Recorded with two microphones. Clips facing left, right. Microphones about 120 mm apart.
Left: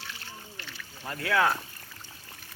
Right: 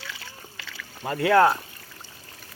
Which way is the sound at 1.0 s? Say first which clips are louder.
Right 9 dB; 80° right.